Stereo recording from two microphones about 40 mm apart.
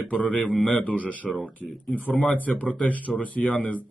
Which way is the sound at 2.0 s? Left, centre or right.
Left.